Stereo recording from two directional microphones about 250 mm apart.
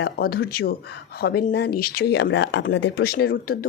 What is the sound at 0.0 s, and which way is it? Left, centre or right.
A woman's voice, left.